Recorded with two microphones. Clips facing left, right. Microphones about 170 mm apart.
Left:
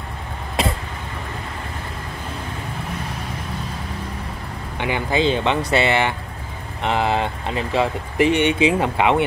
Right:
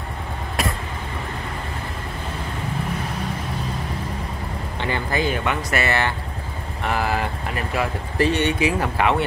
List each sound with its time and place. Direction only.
4.7 s speech: 15° left (ahead or behind)